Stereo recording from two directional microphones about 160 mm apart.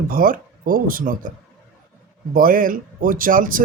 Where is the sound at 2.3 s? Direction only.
60° right (ahead or behind).